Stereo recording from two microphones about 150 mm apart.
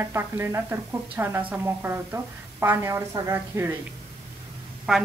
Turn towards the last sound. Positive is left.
turn(degrees=-5)  # may be behind; listen again after turning